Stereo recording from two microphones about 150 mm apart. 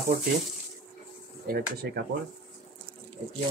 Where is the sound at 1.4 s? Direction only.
90° right.